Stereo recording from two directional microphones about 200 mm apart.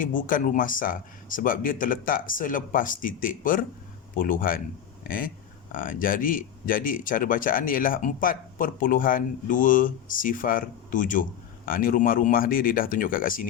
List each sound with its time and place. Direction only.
0.0 s speech: 40° left (ahead or behind)